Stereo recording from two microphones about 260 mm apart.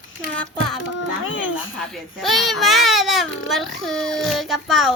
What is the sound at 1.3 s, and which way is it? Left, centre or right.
Speech, left.